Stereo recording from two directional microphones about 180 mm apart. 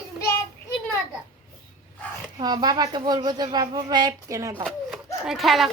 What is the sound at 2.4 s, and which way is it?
Speech, 25° right (ahead or behind).